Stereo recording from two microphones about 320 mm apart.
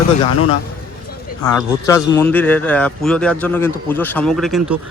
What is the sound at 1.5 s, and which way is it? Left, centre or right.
A man's voice, centre.